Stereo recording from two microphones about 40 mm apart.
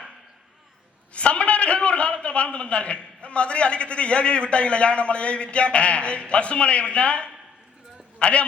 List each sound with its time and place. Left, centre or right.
1.1 s a man's voice: left